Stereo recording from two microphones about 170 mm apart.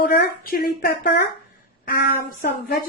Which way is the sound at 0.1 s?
60° left (ahead or behind).